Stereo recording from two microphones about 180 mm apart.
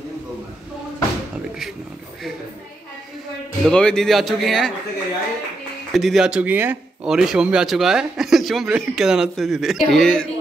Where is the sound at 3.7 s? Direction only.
5° left (ahead or behind).